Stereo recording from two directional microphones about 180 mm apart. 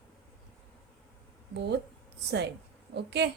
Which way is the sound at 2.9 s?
70° right (ahead or behind).